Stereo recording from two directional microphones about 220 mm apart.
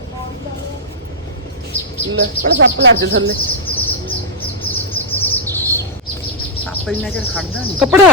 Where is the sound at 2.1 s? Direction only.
50° right (ahead or behind).